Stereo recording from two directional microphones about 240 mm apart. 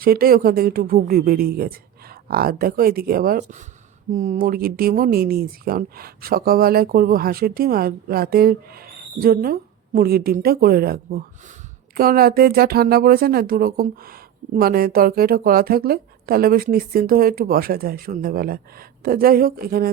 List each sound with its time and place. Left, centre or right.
0.0 s speech: right